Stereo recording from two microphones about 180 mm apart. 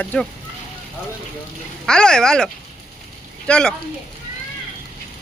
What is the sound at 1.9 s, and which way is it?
Speech, 5° left (ahead or behind).